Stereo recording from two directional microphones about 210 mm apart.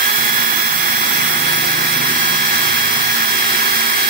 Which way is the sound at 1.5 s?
40° right (ahead or behind).